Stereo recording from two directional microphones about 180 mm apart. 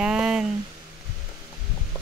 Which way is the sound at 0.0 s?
5° right (ahead or behind).